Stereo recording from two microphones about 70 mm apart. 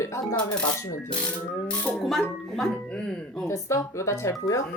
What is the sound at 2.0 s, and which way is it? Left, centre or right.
Speech, centre.